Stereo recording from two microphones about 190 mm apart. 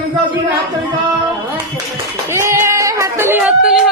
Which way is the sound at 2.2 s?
15° right (ahead or behind).